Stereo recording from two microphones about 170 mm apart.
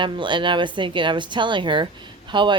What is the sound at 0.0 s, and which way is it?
Speech, 30° right (ahead or behind).